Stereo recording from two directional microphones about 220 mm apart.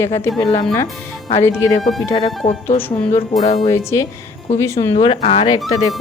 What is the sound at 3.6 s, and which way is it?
Speech, 15° left (ahead or behind).